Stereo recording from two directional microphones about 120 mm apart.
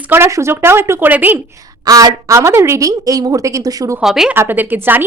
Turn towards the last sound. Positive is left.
turn(degrees=-15)  # may be behind; listen again after turning